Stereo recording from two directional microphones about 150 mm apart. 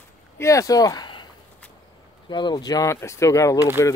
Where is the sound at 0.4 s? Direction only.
20° left (ahead or behind).